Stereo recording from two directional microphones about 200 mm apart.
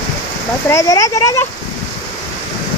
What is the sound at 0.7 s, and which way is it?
Speech, 15° left (ahead or behind).